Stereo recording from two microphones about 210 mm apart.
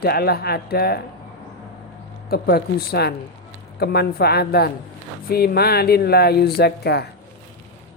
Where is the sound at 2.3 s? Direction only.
50° left (ahead or behind).